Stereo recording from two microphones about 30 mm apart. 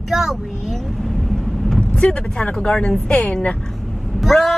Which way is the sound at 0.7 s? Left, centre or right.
Centre.